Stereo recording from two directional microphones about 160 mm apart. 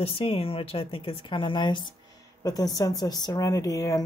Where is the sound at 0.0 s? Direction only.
40° left (ahead or behind).